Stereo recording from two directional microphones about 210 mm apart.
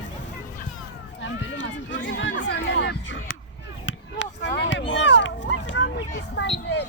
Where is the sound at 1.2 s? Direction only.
60° left (ahead or behind).